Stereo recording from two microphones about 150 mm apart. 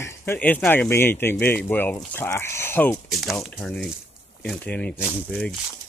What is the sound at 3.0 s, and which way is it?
Speech, centre (ahead or behind).